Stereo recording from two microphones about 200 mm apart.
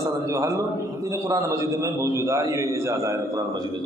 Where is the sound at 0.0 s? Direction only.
15° right (ahead or behind).